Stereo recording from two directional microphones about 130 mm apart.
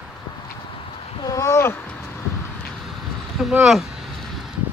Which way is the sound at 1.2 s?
25° left (ahead or behind).